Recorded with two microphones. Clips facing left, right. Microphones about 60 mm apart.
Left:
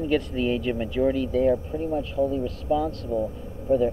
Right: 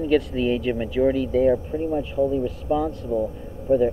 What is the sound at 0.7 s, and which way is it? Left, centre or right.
Speech, centre.